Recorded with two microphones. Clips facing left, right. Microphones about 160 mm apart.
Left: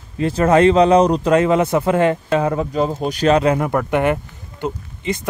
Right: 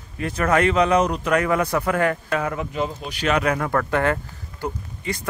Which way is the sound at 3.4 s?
25° left (ahead or behind).